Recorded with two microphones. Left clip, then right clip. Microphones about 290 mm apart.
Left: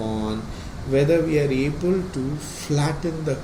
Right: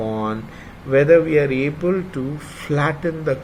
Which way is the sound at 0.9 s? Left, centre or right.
Centre.